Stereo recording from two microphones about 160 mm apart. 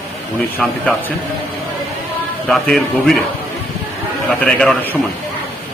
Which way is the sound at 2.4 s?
5° left (ahead or behind).